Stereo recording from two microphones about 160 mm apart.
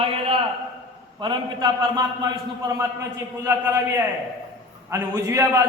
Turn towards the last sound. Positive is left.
turn(degrees=-20)  # may be behind; listen again after turning